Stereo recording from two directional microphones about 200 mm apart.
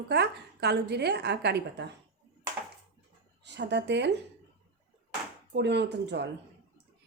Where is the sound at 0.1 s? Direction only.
55° right (ahead or behind).